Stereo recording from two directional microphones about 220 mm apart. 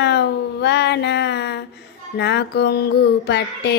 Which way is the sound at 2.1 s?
50° left (ahead or behind).